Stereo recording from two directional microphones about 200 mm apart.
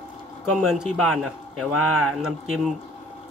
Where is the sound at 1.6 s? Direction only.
90° right.